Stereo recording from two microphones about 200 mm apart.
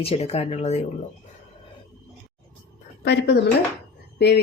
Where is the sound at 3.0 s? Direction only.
55° left (ahead or behind).